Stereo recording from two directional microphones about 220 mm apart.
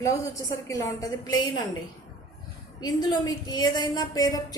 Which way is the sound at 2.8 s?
20° left (ahead or behind).